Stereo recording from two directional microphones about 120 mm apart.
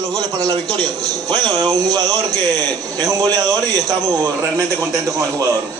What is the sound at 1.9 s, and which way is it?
A man's voice, 30° right (ahead or behind).